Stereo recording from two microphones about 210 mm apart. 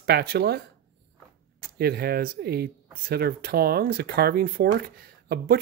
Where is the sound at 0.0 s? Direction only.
50° right (ahead or behind).